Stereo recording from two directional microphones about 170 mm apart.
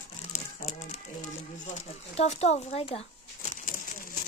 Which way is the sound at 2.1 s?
40° left (ahead or behind).